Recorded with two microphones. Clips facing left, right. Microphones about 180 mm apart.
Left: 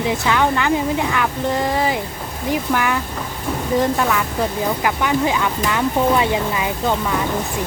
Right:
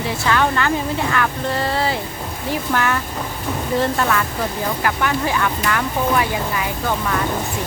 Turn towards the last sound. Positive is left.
turn(degrees=15)  # may be behind; listen again after turning